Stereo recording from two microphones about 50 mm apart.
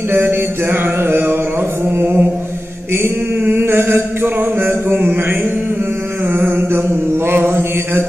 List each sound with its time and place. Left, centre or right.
0.1 s mantra: right
2.0 s chant: right
2.9 s a sound: right
6.3 s mantra: right